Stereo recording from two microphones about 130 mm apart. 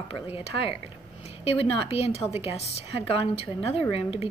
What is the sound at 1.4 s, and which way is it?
A woman's voice, 50° left (ahead or behind).